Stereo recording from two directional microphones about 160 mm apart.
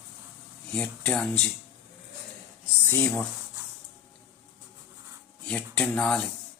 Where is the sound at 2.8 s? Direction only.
15° left (ahead or behind).